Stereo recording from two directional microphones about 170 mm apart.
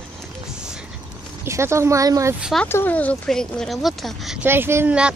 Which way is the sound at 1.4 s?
15° right (ahead or behind).